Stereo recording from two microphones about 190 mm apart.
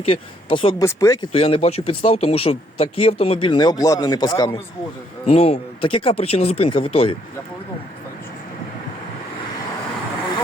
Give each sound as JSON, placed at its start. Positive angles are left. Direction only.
{"t": 0.1, "sound": "speech", "side_deg": 25}
{"t": 1.3, "sound": "speech", "side_deg": 30}
{"t": 5.2, "sound": "speech", "side_deg": 35}